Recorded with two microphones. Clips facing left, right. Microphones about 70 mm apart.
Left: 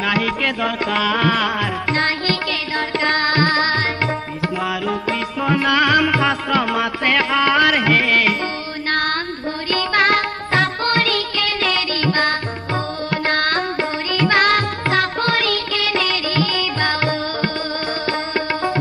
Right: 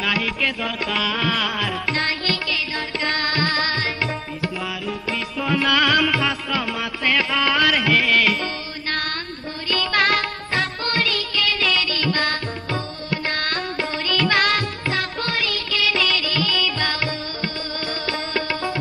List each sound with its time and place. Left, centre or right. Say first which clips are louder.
0.0 s music: left 4 dB; left
5.4 s music: left 3 dB; left
9.7 s music: left 3 dB; left
10.5 s music: left 6 dB; left
13.1 s music: left 5 dB; left
14.1 s music: left 4 dB; left
14.9 s music: left 8 dB; left